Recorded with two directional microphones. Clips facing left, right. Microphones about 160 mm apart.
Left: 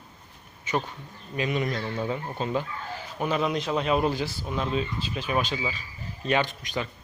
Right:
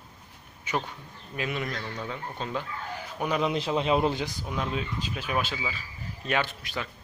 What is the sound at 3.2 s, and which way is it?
Speech, 15° right (ahead or behind).